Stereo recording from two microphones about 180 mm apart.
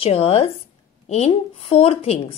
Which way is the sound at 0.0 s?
35° left (ahead or behind).